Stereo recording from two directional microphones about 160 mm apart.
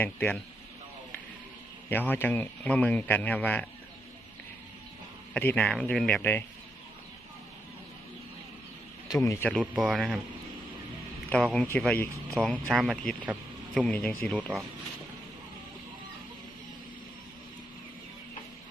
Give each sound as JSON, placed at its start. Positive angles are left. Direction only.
{"t": 0.0, "sound": "a man's voice", "side_deg": 10}
{"t": 1.9, "sound": "a man's voice", "side_deg": 10}
{"t": 5.3, "sound": "a man's voice", "side_deg": 10}
{"t": 9.0, "sound": "speech", "side_deg": 20}
{"t": 9.5, "sound": "speech", "side_deg": 0}
{"t": 11.3, "sound": "speech", "side_deg": 5}